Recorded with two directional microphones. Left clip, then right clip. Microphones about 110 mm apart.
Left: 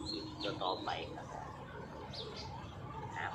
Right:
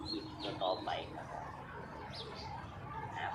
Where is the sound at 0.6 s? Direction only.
25° right (ahead or behind).